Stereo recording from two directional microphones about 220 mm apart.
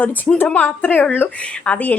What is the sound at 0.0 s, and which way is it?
A woman's voice, 5° left (ahead or behind).